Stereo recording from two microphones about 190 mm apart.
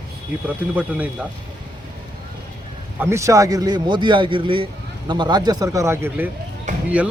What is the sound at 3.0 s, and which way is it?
Speech, 15° right (ahead or behind).